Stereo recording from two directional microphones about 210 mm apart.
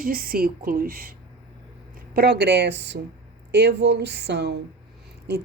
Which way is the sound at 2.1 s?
50° right (ahead or behind).